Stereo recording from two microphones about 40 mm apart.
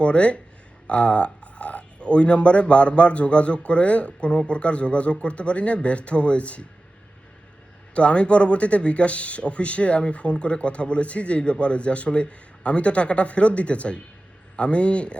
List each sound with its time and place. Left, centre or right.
0.0 s a man's voice: left
7.9 s speech: left